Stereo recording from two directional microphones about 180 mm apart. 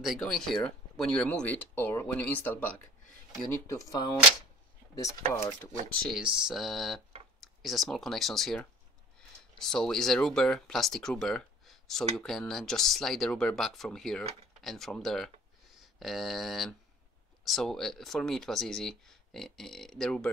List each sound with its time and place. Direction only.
0.0 s speech: centre (ahead or behind); by 4.0 s 15° left (ahead or behind)
5.3 s speech: 10° left (ahead or behind)
6.0 s speech: 5° right (ahead or behind)